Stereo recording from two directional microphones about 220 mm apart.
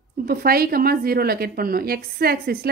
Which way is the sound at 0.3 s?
45° right (ahead or behind).